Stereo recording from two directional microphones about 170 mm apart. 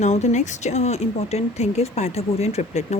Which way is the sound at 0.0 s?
40° left (ahead or behind).